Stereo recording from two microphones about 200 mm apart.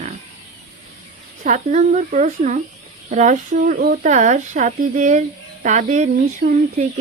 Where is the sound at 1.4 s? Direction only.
35° right (ahead or behind).